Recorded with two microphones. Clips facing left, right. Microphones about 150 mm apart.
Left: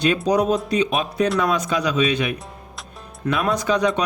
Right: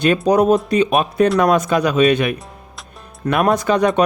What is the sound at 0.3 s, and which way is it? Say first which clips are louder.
Speech: right 7 dB; 55° right (ahead or behind).